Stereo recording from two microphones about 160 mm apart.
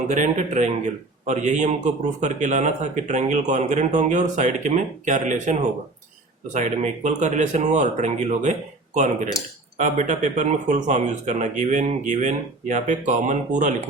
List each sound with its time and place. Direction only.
0.1 s a man's voice: 50° right (ahead or behind)
9.7 s a man's voice: 50° right (ahead or behind)